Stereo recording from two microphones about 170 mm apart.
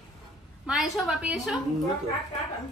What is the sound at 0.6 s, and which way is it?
Speech, centre (ahead or behind).